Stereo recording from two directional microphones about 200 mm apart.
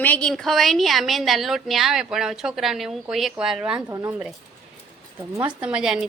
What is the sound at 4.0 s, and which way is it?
Speech, 15° right (ahead or behind).